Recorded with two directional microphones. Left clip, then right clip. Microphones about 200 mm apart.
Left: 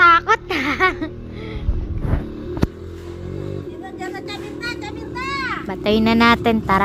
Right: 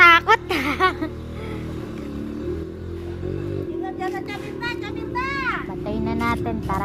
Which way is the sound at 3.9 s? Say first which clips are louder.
Right 1 dB; 5° right (ahead or behind).